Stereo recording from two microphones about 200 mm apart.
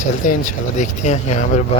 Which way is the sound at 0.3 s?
40° left (ahead or behind).